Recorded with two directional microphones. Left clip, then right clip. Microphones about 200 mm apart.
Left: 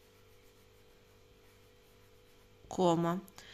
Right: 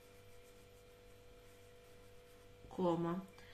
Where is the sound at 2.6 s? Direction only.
60° left (ahead or behind).